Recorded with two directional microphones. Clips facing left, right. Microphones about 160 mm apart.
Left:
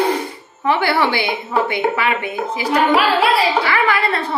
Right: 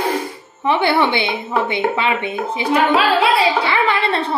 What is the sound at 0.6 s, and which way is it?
Speech, 20° right (ahead or behind).